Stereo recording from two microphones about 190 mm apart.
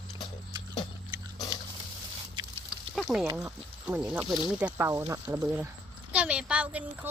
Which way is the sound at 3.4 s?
10° right (ahead or behind).